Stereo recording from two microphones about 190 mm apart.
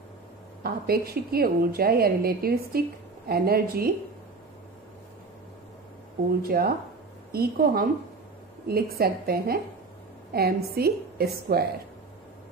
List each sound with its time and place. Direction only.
0.7 s a woman's voice: 55° right (ahead or behind)
6.4 s a woman's voice: 50° right (ahead or behind)